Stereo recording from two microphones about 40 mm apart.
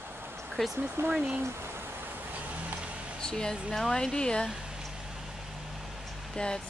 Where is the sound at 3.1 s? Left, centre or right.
Centre.